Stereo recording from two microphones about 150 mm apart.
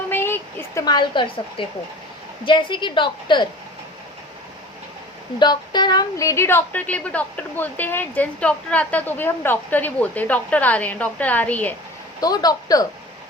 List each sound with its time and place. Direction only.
0.1 s a sound: 15° left (ahead or behind); by 1.6 s 35° left (ahead or behind)
2.4 s a woman's voice: 35° left (ahead or behind)
5.4 s a woman's voice: 30° left (ahead or behind); by 11.7 s 10° left (ahead or behind)
12.2 s speech: 25° left (ahead or behind)